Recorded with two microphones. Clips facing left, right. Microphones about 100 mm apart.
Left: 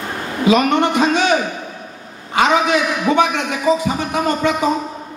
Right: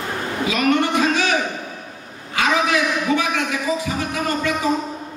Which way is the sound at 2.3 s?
25° left (ahead or behind).